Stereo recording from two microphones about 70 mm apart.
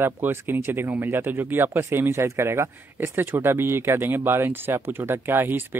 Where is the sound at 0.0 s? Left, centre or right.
Right.